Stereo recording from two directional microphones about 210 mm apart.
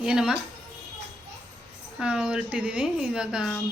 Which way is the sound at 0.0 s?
5° right (ahead or behind).